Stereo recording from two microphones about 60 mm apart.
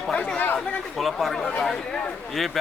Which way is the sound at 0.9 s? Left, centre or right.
Centre.